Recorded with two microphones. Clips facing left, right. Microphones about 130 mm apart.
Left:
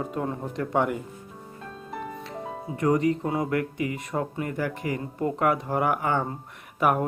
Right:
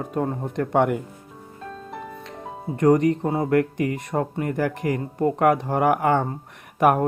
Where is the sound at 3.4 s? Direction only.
45° right (ahead or behind).